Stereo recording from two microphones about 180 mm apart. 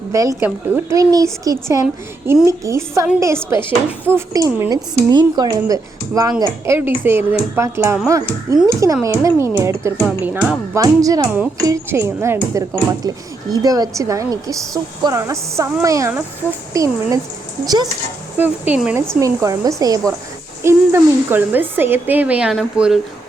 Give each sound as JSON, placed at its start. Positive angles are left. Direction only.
{"t": 0.1, "sound": "speech", "side_deg": -15}
{"t": 10.8, "sound": "speech", "side_deg": -20}
{"t": 18.3, "sound": "speech", "side_deg": -10}
{"t": 19.2, "sound": "speech", "side_deg": -20}